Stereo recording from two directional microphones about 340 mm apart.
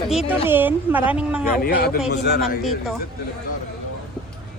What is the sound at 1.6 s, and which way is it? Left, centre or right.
Speech, left.